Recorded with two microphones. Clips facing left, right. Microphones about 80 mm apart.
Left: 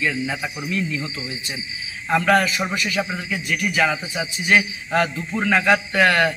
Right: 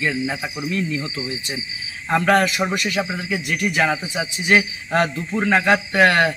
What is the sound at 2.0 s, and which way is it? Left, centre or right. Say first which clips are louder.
Speech: right 1 dB; right.